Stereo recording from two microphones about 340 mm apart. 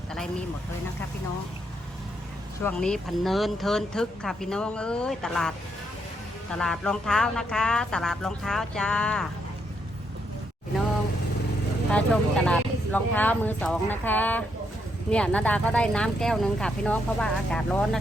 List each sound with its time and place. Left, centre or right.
0.1 s a sound: centre
2.6 s speech: centre
11.9 s speech: centre